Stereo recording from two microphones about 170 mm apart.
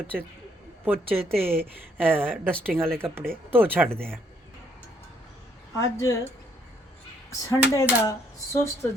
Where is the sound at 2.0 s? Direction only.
10° right (ahead or behind).